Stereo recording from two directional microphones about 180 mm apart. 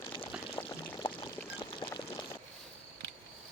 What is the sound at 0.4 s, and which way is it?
Pour, 25° left (ahead or behind).